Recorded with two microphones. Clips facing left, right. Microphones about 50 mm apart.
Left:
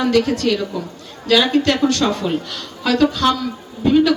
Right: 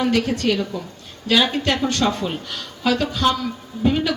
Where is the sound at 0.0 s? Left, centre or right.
Centre.